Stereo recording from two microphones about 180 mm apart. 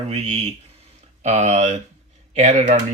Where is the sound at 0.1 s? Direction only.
40° right (ahead or behind).